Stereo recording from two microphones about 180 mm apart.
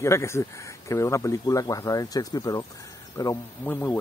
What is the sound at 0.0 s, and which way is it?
Speech, 15° left (ahead or behind).